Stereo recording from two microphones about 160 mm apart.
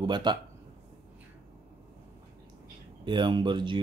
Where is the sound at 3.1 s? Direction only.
30° right (ahead or behind).